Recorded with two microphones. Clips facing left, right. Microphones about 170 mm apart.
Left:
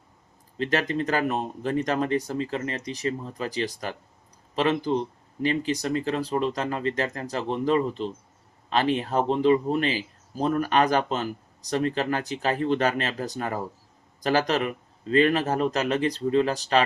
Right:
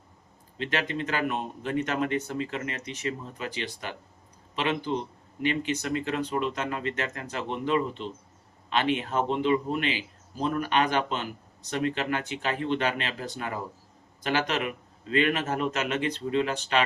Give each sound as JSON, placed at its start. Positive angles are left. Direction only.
{"t": 0.6, "sound": "speech", "side_deg": 40}